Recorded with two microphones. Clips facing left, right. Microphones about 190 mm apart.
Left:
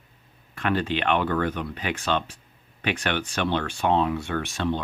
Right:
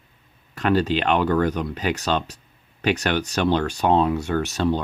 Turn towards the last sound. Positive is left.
turn(degrees=-40)  # may be behind; listen again after turning